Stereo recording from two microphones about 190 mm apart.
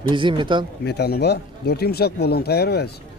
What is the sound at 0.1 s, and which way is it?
Speech, 25° right (ahead or behind).